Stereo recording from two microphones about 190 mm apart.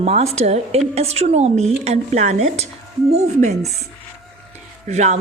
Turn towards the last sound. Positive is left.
turn(degrees=-35)  # may be behind; listen again after turning